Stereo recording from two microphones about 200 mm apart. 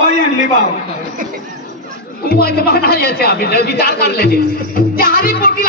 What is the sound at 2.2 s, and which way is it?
A man's voice, 50° left (ahead or behind).